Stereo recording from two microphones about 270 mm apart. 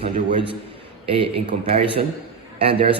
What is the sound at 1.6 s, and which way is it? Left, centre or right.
A man's voice, right.